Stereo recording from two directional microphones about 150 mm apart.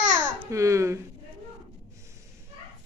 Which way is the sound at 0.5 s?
20° right (ahead or behind).